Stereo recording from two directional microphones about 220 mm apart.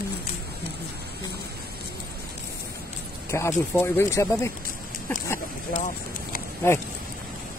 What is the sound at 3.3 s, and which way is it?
Speech, 10° left (ahead or behind).